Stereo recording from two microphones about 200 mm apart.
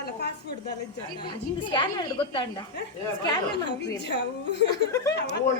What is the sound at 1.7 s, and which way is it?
Speech, 25° left (ahead or behind).